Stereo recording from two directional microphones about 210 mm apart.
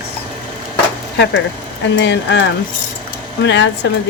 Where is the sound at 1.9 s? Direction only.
55° left (ahead or behind).